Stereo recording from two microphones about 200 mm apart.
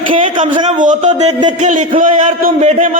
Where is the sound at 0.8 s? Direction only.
40° right (ahead or behind).